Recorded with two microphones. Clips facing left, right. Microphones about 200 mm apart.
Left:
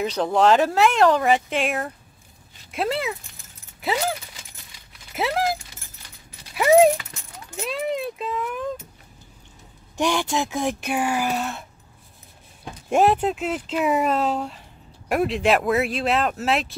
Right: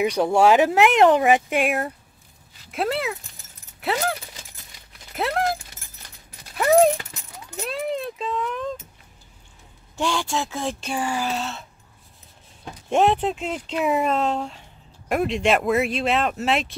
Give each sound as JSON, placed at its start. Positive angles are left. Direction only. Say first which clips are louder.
{"t": 0.0, "sound": "speech", "louder": "right 2 dB", "side_deg": -10}
{"t": 5.1, "sound": "speech", "louder": "even", "side_deg": 5}
{"t": 6.5, "sound": "a sound", "louder": "left 2 dB", "side_deg": 10}
{"t": 7.6, "sound": "speech", "louder": "left 1 dB", "side_deg": 0}
{"t": 9.9, "sound": "speech", "louder": "left 2 dB", "side_deg": 15}
{"t": 12.6, "sound": "speech", "louder": "left 1 dB", "side_deg": 5}